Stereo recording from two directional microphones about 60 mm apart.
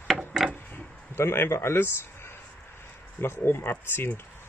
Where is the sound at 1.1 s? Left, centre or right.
Left.